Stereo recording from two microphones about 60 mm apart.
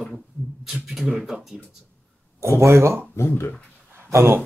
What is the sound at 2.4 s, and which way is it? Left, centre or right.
Speech, right.